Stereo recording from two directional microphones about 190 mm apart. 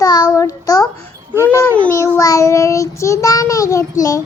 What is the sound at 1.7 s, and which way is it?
A child's voice, 10° left (ahead or behind).